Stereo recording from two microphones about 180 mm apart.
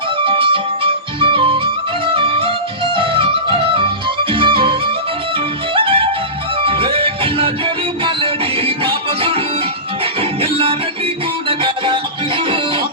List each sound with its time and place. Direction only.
0.2 s music: 30° right (ahead or behind)
4.3 s music: 30° right (ahead or behind)